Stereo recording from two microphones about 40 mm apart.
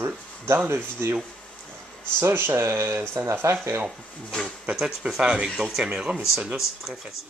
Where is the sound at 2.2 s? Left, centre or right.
Right.